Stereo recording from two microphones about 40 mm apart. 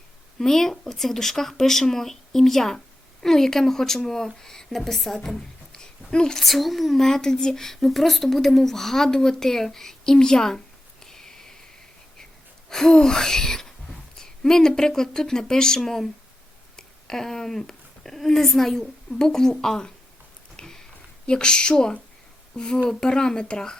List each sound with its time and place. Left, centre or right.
0.3 s a woman's voice: centre
6.4 s speech: centre
11.0 s a sound: centre
12.7 s speech: centre
20.6 s a sound: centre
21.2 s speech: left